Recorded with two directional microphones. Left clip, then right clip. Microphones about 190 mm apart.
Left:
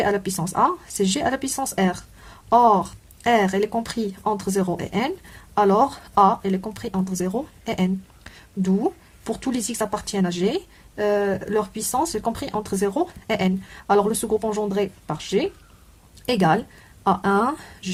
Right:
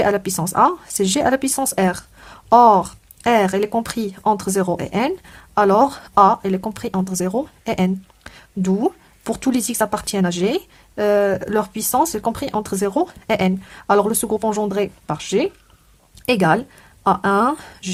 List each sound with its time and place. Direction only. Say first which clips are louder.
0.0 s speech: right 4 dB; 30° right (ahead or behind)